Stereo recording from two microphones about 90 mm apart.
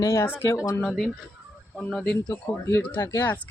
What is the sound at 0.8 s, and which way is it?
Speech, centre (ahead or behind).